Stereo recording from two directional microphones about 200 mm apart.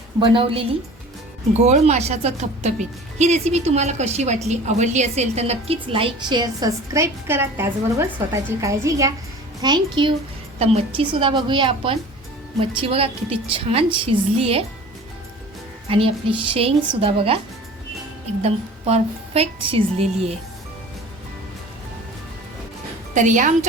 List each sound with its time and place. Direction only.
0.2 s a woman's voice: 25° right (ahead or behind)
1.6 s a woman's voice: 35° right (ahead or behind)
15.9 s a woman's voice: 30° right (ahead or behind)
18.4 s speech: 30° right (ahead or behind)
23.1 s speech: 40° right (ahead or behind)